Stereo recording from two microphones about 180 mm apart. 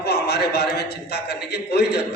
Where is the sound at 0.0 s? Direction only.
65° left (ahead or behind).